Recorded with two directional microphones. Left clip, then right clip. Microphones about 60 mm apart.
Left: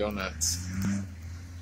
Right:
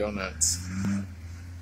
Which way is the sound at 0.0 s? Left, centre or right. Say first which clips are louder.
Right 2 dB; centre.